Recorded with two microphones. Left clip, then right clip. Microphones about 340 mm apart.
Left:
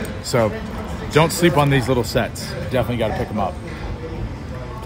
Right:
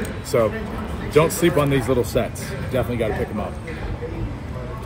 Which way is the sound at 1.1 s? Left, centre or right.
Left.